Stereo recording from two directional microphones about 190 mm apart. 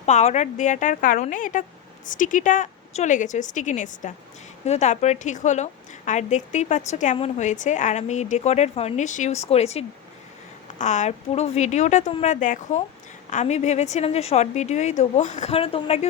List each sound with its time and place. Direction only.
0.0 s a woman's voice: 35° left (ahead or behind)